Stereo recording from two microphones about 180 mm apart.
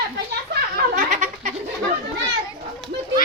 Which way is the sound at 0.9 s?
45° right (ahead or behind).